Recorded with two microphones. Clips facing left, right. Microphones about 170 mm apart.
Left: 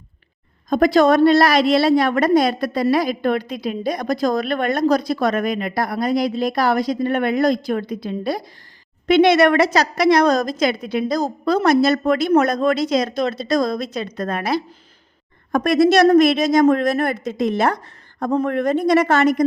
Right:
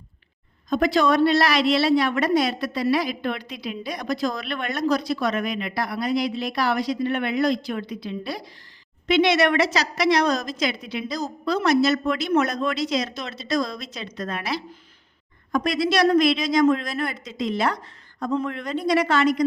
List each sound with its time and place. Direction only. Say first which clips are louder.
0.7 s a woman's voice: left 6 dB; 45° left (ahead or behind)